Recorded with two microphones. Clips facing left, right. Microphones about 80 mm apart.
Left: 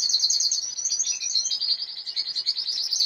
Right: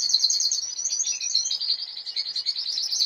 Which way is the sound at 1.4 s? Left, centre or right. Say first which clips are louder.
Even; right.